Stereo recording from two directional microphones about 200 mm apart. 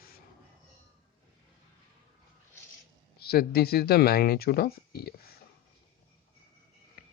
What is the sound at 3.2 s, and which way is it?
Speech, 50° left (ahead or behind).